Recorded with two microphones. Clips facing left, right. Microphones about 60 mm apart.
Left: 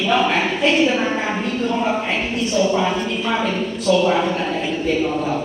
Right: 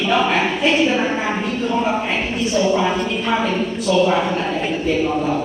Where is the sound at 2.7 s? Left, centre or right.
Centre.